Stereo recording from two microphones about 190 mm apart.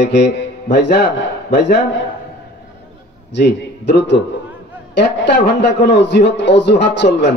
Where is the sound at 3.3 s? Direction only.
65° left (ahead or behind).